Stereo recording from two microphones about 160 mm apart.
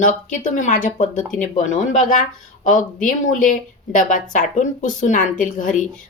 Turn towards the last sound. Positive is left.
turn(degrees=55)  # may be behind; listen again after turning